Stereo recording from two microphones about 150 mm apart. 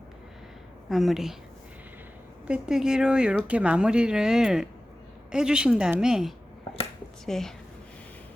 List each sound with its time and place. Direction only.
0.9 s speech: centre (ahead or behind)
2.5 s speech: 5° right (ahead or behind)